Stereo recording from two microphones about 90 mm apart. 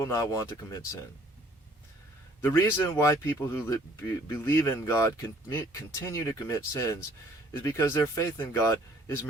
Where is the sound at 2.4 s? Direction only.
25° left (ahead or behind).